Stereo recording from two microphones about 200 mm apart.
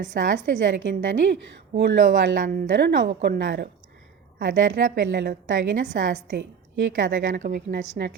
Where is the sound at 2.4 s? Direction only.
45° right (ahead or behind).